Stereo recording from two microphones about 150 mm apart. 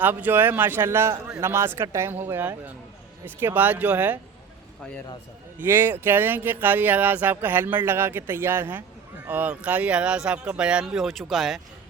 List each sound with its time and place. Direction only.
0.0 s speech: 15° right (ahead or behind)
5.5 s speech: 15° right (ahead or behind)